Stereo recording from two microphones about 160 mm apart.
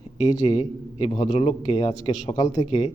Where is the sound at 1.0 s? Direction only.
35° left (ahead or behind).